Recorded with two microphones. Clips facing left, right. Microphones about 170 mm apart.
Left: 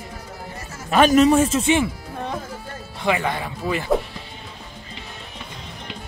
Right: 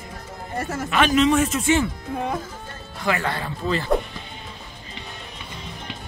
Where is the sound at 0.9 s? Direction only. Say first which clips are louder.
Left 4 dB; 40° left (ahead or behind).